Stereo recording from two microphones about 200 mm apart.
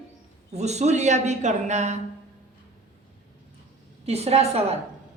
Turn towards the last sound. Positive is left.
turn(degrees=-30)  # may be behind; listen again after turning